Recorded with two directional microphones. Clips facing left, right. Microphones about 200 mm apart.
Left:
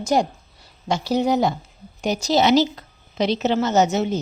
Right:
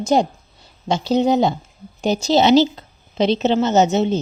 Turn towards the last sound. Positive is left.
turn(degrees=-25)  # may be behind; listen again after turning